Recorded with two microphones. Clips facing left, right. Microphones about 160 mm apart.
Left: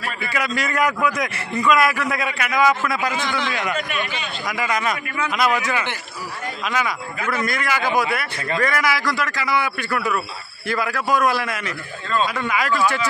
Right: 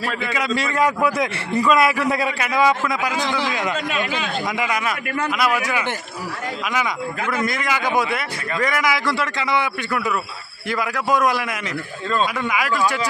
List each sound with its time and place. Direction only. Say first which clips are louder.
0.2 s a man's voice: left 1 dB; 25° right (ahead or behind)
4.5 s a man's voice: left 3 dB; 15° right (ahead or behind)